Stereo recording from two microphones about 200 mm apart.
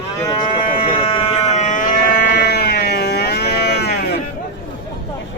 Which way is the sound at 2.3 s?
55° left (ahead or behind).